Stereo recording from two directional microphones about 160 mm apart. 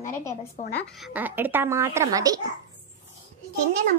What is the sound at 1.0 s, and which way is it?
A woman's voice, 10° right (ahead or behind).